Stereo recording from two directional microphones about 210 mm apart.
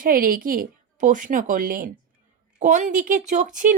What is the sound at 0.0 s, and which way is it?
Speech, 40° right (ahead or behind).